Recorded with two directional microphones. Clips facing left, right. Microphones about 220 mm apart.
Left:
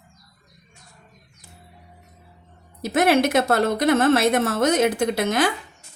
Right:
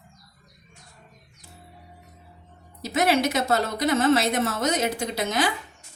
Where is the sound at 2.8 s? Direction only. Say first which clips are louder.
Left 4 dB; 55° left (ahead or behind).